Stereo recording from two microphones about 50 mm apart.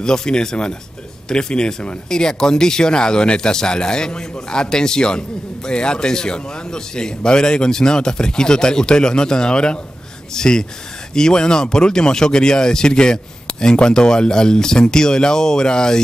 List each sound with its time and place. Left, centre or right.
0.0 s speech: centre